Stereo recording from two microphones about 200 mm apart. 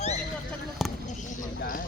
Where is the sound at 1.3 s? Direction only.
45° left (ahead or behind).